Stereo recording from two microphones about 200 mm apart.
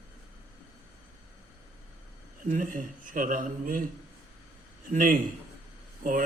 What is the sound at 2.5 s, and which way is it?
A man's voice, 40° right (ahead or behind).